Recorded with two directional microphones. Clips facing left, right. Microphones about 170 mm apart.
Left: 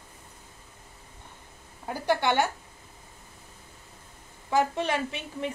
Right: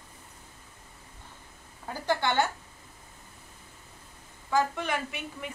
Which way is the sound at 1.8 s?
15° left (ahead or behind).